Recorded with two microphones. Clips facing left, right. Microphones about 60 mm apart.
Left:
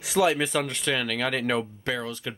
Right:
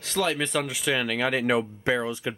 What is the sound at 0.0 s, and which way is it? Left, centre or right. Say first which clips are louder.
Speech: left 4 dB; centre.